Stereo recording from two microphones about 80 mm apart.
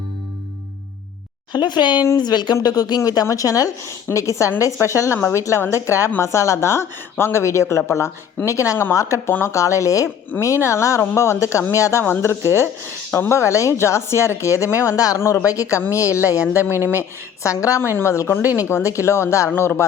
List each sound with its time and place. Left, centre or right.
1.5 s speech: left
15.2 s speech: left
16.6 s speech: right
17.4 s speech: left